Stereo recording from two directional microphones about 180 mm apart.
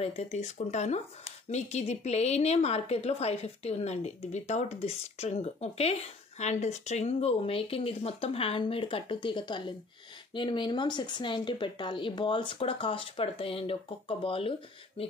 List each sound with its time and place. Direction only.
0.0 s a woman's voice: 35° left (ahead or behind)